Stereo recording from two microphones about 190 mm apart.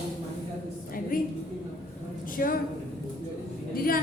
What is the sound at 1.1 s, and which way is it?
Speech, 50° left (ahead or behind).